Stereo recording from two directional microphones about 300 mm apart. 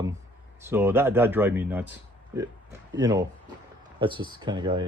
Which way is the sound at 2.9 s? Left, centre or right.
Centre.